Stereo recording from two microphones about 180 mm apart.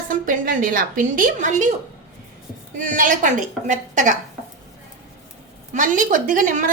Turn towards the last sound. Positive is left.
turn(degrees=-50)  # may be behind; listen again after turning